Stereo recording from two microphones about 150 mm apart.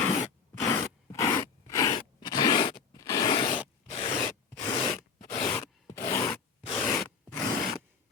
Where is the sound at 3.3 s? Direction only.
35° left (ahead or behind).